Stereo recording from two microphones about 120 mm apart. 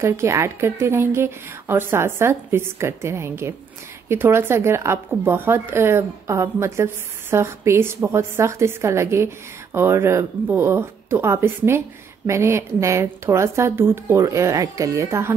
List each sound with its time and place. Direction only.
0.0 s speech: 25° right (ahead or behind)